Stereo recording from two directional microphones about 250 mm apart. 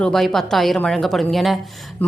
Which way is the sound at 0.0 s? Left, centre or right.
Centre.